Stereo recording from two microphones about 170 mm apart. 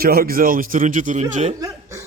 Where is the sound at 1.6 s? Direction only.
20° right (ahead or behind).